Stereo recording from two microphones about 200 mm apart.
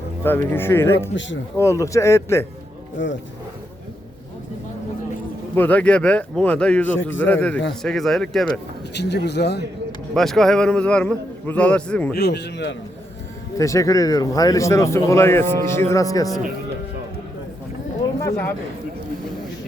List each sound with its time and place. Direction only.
0.2 s speech: 10° left (ahead or behind)
3.0 s speech: 65° left (ahead or behind)
5.5 s a man's voice: 5° left (ahead or behind)
8.9 s speech: 60° left (ahead or behind)
10.2 s a man's voice: centre (ahead or behind)
12.1 s speech: 55° left (ahead or behind)
13.6 s speech: 15° left (ahead or behind)